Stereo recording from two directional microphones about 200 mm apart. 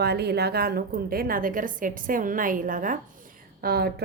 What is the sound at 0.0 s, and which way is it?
A woman's voice, 55° right (ahead or behind).